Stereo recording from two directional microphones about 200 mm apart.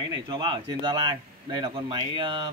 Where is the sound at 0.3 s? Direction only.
20° right (ahead or behind).